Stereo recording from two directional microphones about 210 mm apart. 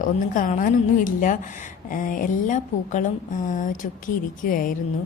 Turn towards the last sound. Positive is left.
turn(degrees=40)  # may be behind; listen again after turning